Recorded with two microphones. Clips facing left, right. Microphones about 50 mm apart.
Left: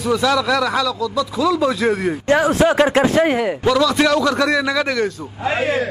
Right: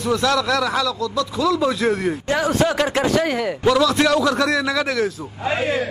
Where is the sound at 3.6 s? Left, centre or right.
Centre.